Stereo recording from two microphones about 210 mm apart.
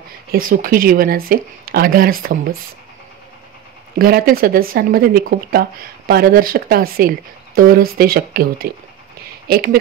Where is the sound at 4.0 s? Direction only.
45° right (ahead or behind).